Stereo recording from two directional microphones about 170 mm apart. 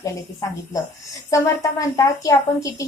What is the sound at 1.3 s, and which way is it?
A woman's voice, 20° left (ahead or behind).